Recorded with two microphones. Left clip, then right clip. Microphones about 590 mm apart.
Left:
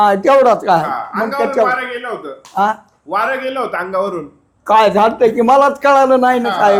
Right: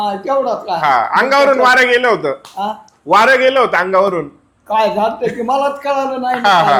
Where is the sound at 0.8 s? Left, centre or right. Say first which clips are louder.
Right 7 dB; right; by 4.2 s centre.